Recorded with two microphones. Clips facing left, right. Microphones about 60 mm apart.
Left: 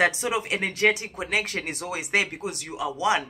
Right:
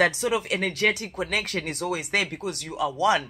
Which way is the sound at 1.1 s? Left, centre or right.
Centre.